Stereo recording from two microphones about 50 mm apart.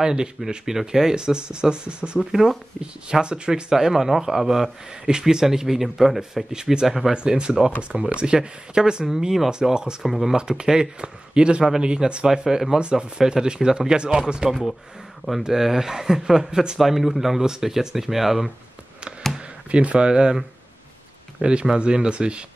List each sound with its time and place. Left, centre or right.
0.0 s a man's voice: centre
2.1 s speech: centre
2.8 s a man's voice: centre
10.0 s speech: centre
10.6 s a man's voice: centre
12.3 s a man's voice: centre
19.3 s a sound: right
20.1 s a man's voice: centre